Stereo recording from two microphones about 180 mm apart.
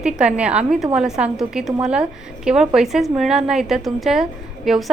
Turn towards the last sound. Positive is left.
turn(degrees=0)  # may be behind; listen again after turning